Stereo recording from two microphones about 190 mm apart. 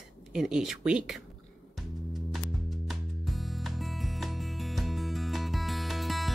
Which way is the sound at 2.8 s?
Centre (ahead or behind).